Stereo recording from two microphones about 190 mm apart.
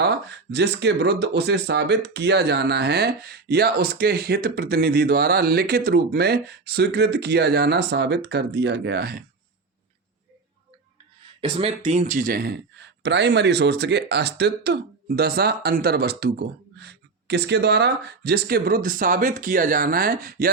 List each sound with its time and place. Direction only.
0.0 s speech: 60° right (ahead or behind)
11.3 s speech: 30° right (ahead or behind); by 20.5 s 50° right (ahead or behind)